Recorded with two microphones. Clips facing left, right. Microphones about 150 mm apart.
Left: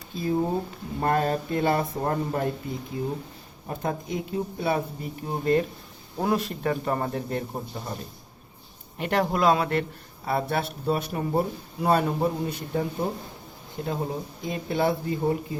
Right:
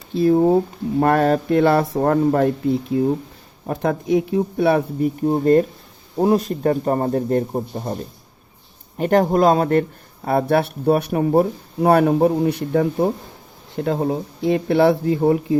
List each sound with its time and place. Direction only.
0.1 s speech: 70° right (ahead or behind)
3.7 s speech: 75° right (ahead or behind)
5.2 s speech: 40° right (ahead or behind)
9.0 s speech: 45° right (ahead or behind)
10.2 s speech: 55° right (ahead or behind)